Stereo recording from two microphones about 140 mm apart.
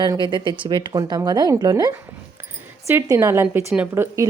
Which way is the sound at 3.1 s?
20° right (ahead or behind).